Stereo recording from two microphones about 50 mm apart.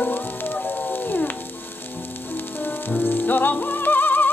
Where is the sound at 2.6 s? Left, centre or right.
Left.